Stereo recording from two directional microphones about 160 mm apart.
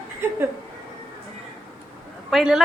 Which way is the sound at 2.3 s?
Centre (ahead or behind).